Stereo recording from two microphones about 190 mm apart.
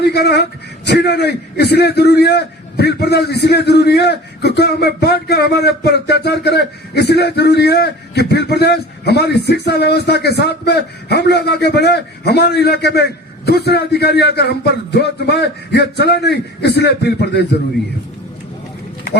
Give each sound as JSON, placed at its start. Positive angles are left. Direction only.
{"t": 0.0, "sound": "a man's voice", "side_deg": 60}